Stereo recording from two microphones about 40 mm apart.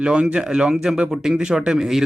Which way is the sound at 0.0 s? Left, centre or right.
Right.